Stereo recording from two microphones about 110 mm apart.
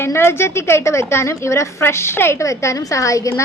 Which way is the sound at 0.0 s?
20° left (ahead or behind).